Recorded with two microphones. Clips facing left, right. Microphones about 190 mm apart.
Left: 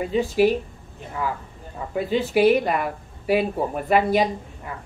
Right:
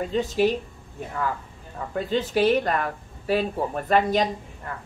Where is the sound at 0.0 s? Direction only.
10° left (ahead or behind).